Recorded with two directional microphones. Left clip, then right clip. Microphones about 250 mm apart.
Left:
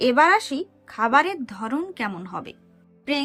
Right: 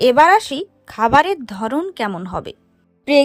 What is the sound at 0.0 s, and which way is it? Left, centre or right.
Speech, right.